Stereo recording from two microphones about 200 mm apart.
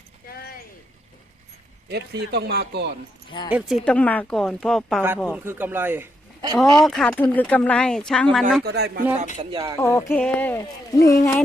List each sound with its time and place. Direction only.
0.3 s a sound: 50° left (ahead or behind)
1.9 s speech: 55° right (ahead or behind)
3.2 s speech: 25° left (ahead or behind)
3.8 s speech: 5° left (ahead or behind)
5.3 s speech: 10° right (ahead or behind)
6.6 s speech: centre (ahead or behind)
8.6 s speech: 55° right (ahead or behind)
9.4 s speech: 20° right (ahead or behind)
9.8 s speech: 15° left (ahead or behind)